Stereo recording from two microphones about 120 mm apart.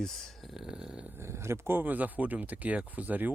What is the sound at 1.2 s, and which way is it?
Speech, 20° right (ahead or behind).